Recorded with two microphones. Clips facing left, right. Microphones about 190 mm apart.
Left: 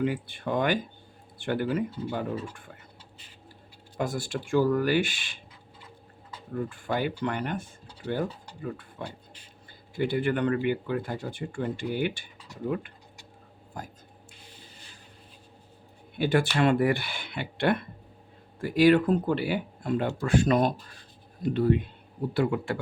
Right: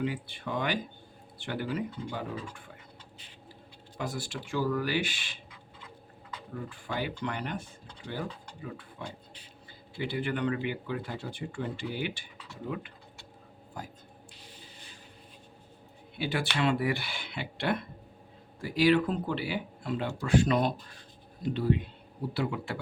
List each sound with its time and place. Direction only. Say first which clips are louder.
0.0 s speech: left 5 dB; 50° left (ahead or behind)
3.9 s speech: left 6 dB; 50° left (ahead or behind)
6.5 s speech: left 7 dB; 50° left (ahead or behind)
16.1 s speech: left 7 dB; 50° left (ahead or behind)